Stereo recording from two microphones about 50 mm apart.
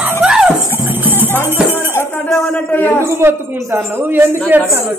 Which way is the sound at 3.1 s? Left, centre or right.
Right.